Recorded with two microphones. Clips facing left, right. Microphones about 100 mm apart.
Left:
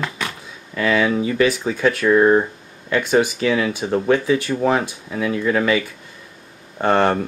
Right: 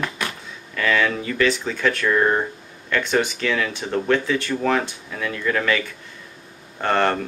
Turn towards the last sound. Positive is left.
turn(degrees=15)  # may be behind; listen again after turning